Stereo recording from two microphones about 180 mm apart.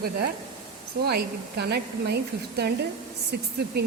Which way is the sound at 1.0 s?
65° right (ahead or behind).